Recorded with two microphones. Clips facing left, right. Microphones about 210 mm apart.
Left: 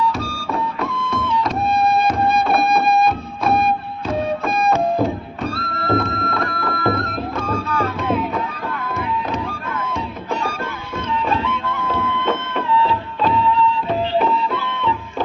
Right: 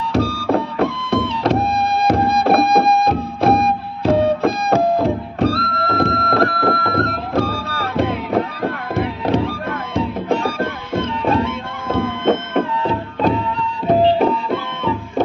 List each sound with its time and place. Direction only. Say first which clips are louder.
0.1 s music: right 8 dB; 65° right (ahead or behind); by 14.9 s 45° right (ahead or behind)